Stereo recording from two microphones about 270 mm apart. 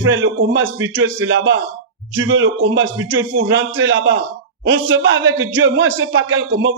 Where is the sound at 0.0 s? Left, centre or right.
Right.